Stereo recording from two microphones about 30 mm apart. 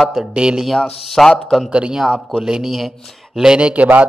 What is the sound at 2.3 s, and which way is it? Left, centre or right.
Speech, right.